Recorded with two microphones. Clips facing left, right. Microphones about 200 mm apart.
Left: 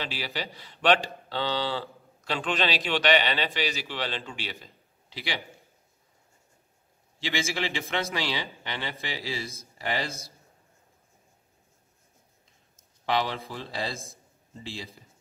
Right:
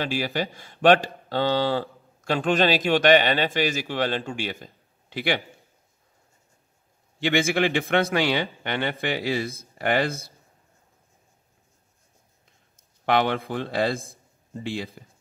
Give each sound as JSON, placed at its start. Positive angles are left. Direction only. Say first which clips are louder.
{"t": 0.0, "sound": "a man's voice", "louder": "right 8 dB", "side_deg": -50}
{"t": 7.2, "sound": "a man's voice", "louder": "right 9 dB", "side_deg": -55}
{"t": 13.0, "sound": "a man's voice", "louder": "right 6 dB", "side_deg": -55}